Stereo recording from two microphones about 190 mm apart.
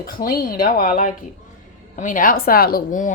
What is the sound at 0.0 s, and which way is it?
A woman's voice, 50° left (ahead or behind).